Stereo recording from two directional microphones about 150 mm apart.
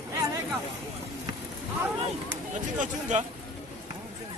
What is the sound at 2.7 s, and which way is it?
Speech, 55° right (ahead or behind).